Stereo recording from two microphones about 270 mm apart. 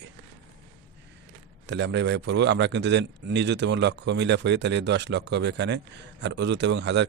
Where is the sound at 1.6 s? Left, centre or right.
Right.